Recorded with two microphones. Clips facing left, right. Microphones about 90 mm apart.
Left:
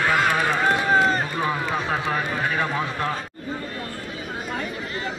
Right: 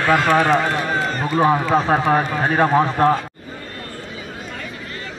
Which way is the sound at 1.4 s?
40° right (ahead or behind).